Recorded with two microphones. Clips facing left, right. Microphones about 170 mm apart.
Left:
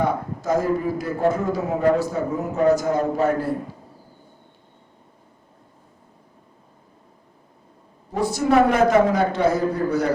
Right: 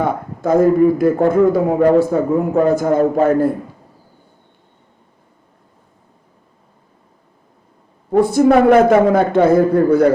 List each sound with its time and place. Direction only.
0.0 s a man's voice: 55° right (ahead or behind)
8.1 s a man's voice: 55° right (ahead or behind)